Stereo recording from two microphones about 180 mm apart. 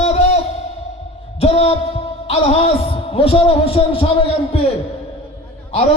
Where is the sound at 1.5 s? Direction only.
35° left (ahead or behind).